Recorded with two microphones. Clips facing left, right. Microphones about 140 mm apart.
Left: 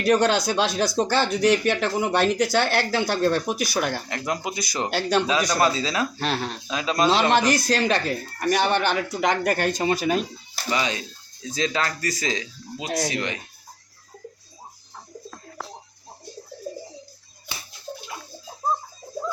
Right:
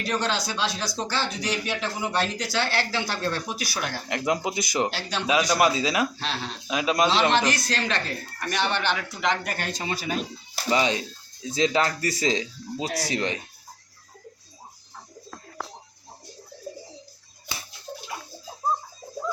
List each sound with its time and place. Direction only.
0.0 s speech: 50° left (ahead or behind)
4.1 s speech: 20° right (ahead or behind)
4.9 s speech: 55° left (ahead or behind)
5.2 s a man's voice: 10° right (ahead or behind)
6.1 s speech: 50° left (ahead or behind)
6.7 s a man's voice: 15° right (ahead or behind)
7.1 s speech: 45° left (ahead or behind)
10.7 s speech: 25° right (ahead or behind)